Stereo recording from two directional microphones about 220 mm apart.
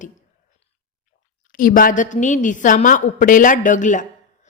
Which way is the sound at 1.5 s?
40° left (ahead or behind).